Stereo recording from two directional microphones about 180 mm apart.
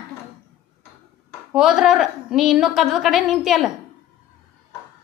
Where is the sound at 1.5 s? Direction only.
Centre (ahead or behind).